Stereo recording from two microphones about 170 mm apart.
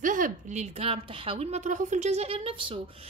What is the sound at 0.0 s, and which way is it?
Speech, 50° right (ahead or behind).